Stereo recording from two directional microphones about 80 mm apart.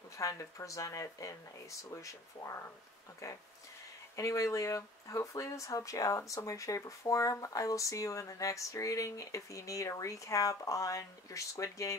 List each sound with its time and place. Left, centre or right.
0.2 s speech: left